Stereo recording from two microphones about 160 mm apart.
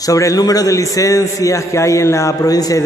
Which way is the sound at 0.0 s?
20° left (ahead or behind).